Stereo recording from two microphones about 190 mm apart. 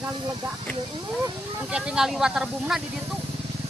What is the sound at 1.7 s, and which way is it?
Speech, 5° right (ahead or behind).